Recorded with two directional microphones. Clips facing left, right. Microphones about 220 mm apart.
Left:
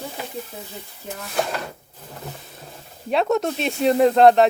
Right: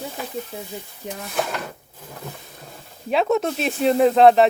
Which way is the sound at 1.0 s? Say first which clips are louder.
Right 2 dB; 15° right (ahead or behind).